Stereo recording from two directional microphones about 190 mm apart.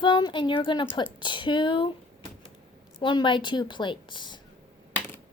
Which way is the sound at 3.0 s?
25° left (ahead or behind).